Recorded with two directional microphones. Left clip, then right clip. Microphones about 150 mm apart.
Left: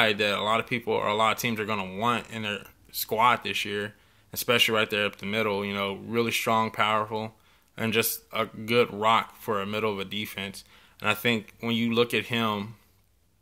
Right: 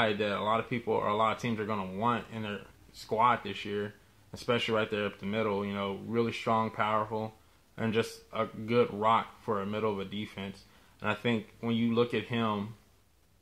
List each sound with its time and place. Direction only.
0.0 s speech: 15° left (ahead or behind)